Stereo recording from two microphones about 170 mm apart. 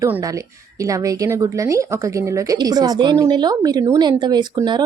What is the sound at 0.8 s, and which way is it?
A woman's voice, 20° right (ahead or behind).